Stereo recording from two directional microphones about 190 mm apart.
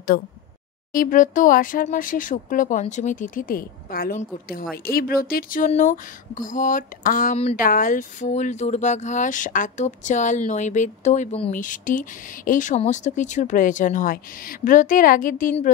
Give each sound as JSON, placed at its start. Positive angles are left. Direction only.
{"t": 0.9, "sound": "speech", "side_deg": 45}